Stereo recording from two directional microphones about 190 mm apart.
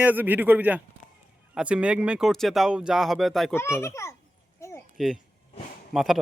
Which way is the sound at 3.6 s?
15° left (ahead or behind).